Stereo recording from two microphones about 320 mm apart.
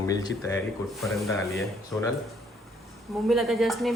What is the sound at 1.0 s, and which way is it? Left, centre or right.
A man's voice, centre.